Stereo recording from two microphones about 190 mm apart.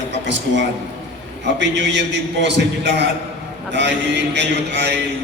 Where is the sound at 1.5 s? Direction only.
65° right (ahead or behind).